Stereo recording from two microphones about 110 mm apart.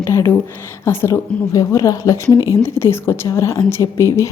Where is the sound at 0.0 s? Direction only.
25° left (ahead or behind).